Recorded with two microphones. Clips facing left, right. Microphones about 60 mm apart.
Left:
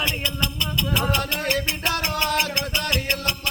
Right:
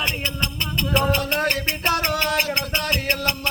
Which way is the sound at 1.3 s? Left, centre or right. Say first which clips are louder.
Right 2 dB; right.